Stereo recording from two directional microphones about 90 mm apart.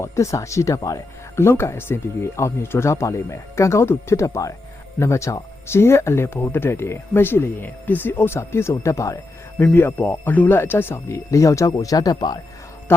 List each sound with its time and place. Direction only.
0.0 s speech: 35° left (ahead or behind)
9.7 s speech: 20° left (ahead or behind); by 12.4 s 45° left (ahead or behind)